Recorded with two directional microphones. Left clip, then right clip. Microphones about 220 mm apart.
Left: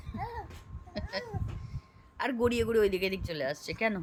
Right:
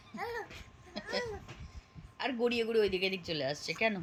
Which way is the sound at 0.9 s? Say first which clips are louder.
Right 1 dB; 5° left (ahead or behind).